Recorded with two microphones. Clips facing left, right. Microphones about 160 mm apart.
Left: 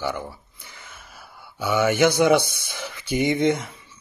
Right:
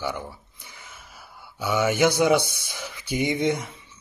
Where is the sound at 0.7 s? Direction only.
15° right (ahead or behind).